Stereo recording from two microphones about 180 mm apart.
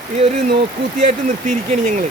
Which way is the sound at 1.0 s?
40° right (ahead or behind).